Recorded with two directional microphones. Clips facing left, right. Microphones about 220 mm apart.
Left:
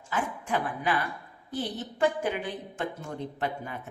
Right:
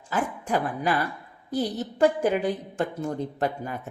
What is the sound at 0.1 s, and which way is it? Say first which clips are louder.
A woman's voice: right 4 dB; 40° right (ahead or behind).